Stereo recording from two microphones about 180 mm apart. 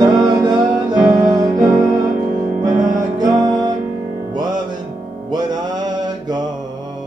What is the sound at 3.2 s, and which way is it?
Music, 20° right (ahead or behind).